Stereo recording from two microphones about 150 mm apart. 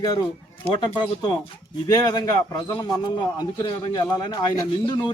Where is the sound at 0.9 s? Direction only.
30° left (ahead or behind).